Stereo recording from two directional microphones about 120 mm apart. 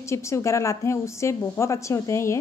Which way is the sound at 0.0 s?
25° left (ahead or behind).